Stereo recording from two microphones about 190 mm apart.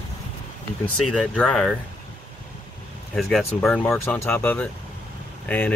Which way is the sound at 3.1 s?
Centre (ahead or behind).